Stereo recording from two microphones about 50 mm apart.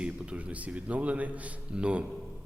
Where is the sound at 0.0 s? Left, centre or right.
Right.